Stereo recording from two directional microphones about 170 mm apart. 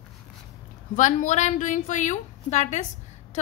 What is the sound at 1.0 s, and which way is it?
A woman's voice, 50° left (ahead or behind).